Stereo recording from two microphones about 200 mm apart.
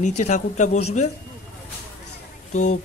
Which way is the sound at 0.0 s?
35° left (ahead or behind).